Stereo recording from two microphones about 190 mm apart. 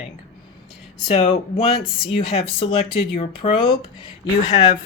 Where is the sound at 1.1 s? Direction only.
30° left (ahead or behind).